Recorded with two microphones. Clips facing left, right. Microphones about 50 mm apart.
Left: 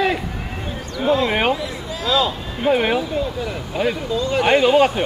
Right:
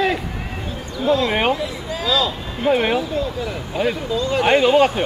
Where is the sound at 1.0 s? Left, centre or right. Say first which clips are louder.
Even; left.